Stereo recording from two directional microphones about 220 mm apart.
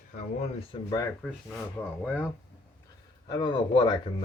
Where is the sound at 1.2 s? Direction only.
Centre (ahead or behind).